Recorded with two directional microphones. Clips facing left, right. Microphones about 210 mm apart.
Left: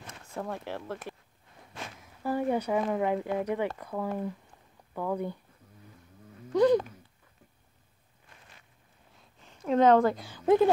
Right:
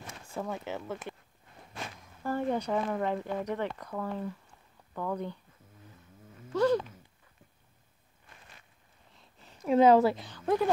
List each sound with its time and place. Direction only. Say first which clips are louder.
0.4 s speech: even; centre (ahead or behind)
6.5 s speech: left 4 dB; 15° left (ahead or behind)
9.7 s speech: even; 10° right (ahead or behind)
10.3 s speech: left 6 dB; 15° left (ahead or behind)